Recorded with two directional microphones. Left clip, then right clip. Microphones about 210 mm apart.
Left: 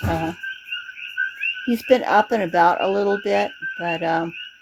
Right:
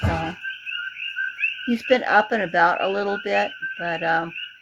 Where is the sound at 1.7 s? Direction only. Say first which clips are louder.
Left 2 dB; 35° left (ahead or behind).